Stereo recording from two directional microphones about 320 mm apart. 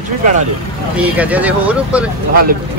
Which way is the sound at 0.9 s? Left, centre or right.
Centre.